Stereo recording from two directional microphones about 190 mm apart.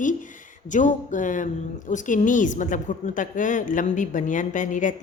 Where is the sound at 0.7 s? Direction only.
40° left (ahead or behind).